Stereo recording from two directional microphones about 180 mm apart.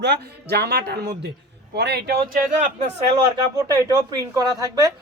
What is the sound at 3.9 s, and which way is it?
Speech, 20° right (ahead or behind).